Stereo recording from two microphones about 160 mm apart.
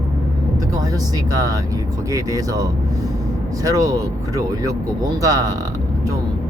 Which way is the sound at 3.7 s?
20° right (ahead or behind).